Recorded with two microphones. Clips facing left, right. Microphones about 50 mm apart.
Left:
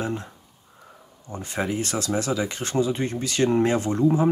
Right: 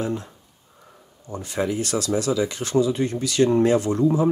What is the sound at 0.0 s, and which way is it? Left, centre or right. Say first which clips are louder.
Speech: right 2 dB; left.